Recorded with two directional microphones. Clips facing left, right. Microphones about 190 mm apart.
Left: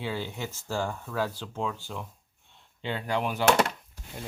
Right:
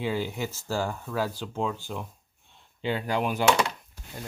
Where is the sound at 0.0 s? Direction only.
15° right (ahead or behind).